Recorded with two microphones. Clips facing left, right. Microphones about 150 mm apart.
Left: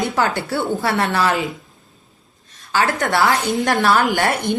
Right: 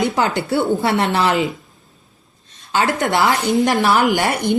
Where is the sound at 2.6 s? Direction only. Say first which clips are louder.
Right 1 dB; 20° right (ahead or behind).